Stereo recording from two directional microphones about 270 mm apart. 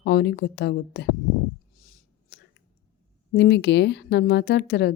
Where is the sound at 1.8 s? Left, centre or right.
Left.